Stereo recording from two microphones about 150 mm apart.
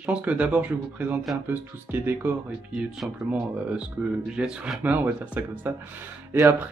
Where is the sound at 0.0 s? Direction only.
10° right (ahead or behind).